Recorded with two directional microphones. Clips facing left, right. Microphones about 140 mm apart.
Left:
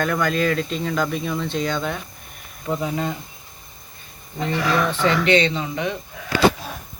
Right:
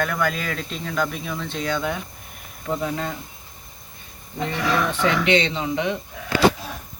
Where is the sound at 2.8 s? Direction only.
5° left (ahead or behind).